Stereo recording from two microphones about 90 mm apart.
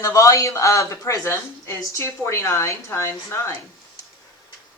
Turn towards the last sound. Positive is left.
turn(degrees=30)  # may be behind; listen again after turning